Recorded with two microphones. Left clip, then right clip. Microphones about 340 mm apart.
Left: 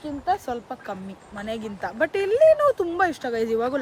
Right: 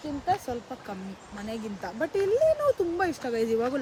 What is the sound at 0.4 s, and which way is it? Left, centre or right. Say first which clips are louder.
Speech: left 5 dB; centre.